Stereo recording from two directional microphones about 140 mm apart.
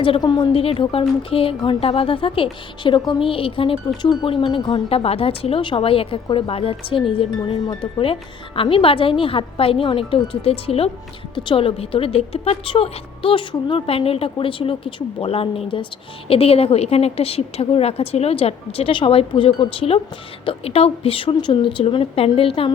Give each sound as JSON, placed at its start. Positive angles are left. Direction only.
{"t": 0.0, "sound": "a woman's voice", "side_deg": 35}